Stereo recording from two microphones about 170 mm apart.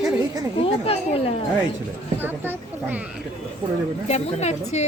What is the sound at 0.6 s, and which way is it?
Speech, 35° left (ahead or behind).